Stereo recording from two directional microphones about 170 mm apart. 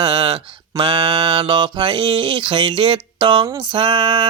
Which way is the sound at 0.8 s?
30° right (ahead or behind).